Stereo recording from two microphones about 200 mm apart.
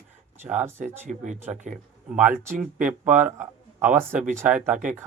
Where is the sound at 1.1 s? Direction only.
40° right (ahead or behind).